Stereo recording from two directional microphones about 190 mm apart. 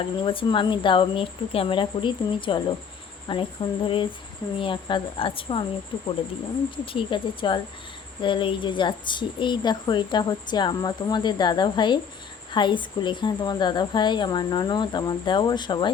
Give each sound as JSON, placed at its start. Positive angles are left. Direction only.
{"t": 0.2, "sound": "a woman's voice", "side_deg": 25}
{"t": 6.8, "sound": "a woman's voice", "side_deg": 25}